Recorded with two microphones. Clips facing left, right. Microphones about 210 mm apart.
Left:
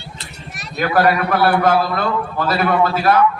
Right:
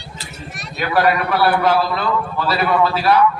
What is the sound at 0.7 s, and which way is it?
A man's voice, 45° left (ahead or behind).